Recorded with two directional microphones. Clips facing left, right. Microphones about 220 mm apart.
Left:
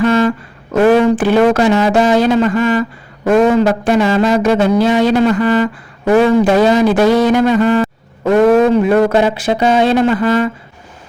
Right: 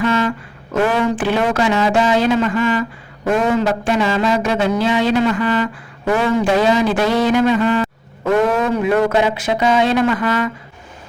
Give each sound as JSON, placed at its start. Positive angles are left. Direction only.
{"t": 0.0, "sound": "a man's voice", "side_deg": 40}